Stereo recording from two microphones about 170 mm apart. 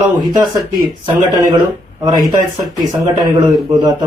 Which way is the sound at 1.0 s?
25° right (ahead or behind).